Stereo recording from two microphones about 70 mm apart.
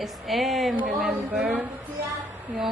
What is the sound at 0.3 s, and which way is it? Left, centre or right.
A woman's voice, centre.